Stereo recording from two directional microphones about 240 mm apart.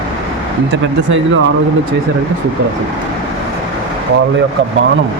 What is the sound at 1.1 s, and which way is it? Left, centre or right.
Speech, right.